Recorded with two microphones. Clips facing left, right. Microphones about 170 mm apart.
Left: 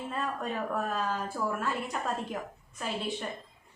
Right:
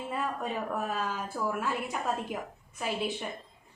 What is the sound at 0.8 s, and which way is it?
A woman's voice, 10° right (ahead or behind).